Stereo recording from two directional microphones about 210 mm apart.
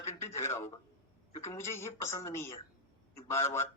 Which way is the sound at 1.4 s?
15° left (ahead or behind).